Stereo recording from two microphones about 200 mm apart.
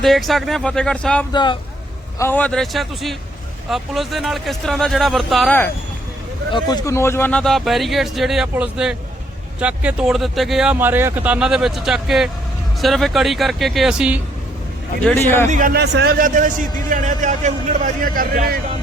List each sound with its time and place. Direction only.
0.0 s speech: centre (ahead or behind)
1.3 s speech: 20° left (ahead or behind)
2.1 s speech: 10° left (ahead or behind)
6.5 s speech: 20° left (ahead or behind); by 14.2 s 5° right (ahead or behind)
15.0 s a man's voice: 10° left (ahead or behind)
15.4 s a man's voice: 45° right (ahead or behind)